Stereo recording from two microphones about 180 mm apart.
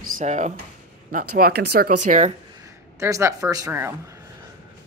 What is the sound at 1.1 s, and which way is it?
Speech, 55° right (ahead or behind).